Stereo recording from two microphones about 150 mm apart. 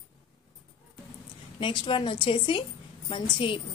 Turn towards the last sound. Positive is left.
turn(degrees=35)  # may be behind; listen again after turning